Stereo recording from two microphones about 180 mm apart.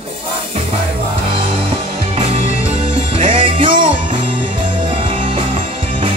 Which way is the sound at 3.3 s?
30° right (ahead or behind).